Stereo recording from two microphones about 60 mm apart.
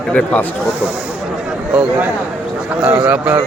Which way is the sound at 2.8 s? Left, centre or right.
Right.